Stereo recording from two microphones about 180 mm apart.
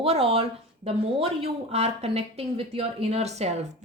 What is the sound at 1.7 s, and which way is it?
Speech, 35° right (ahead or behind).